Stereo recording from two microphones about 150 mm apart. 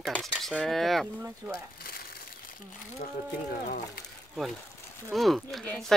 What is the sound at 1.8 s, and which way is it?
Crumpling, 90° left.